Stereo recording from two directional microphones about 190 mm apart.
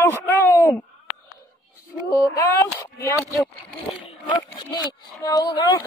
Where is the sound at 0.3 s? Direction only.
15° left (ahead or behind).